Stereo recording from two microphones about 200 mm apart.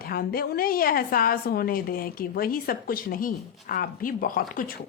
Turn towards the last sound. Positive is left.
turn(degrees=45)  # may be behind; listen again after turning